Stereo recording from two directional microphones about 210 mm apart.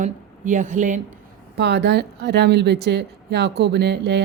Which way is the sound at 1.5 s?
50° right (ahead or behind).